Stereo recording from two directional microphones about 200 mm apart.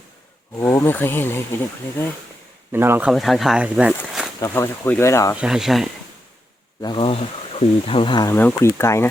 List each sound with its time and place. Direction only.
0.5 s speech: 10° left (ahead or behind)
2.7 s speech: 10° right (ahead or behind)
4.4 s speech: 15° left (ahead or behind)
5.4 s speech: centre (ahead or behind)
6.8 s speech: 25° left (ahead or behind)